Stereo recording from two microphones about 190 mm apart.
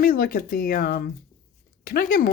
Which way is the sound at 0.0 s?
50° left (ahead or behind).